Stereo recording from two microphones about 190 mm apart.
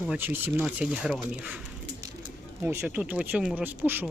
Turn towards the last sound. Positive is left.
turn(degrees=-10)  # may be behind; listen again after turning